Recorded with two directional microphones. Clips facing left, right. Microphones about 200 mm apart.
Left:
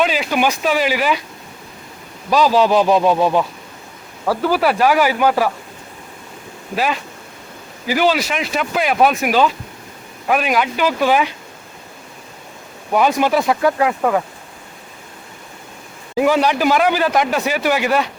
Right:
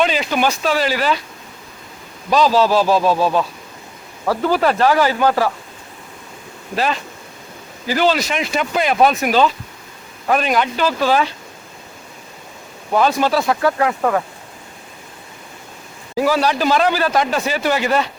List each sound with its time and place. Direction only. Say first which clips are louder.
0.0 s speech: even; 5° left (ahead or behind)
2.3 s speech: left 1 dB; 10° left (ahead or behind)
6.7 s speech: even; 10° left (ahead or behind)
12.9 s speech: left 1 dB; 15° left (ahead or behind)
16.1 s speech: left 2 dB; 20° left (ahead or behind)